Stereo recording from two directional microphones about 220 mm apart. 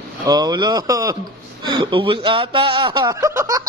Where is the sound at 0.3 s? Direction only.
20° right (ahead or behind).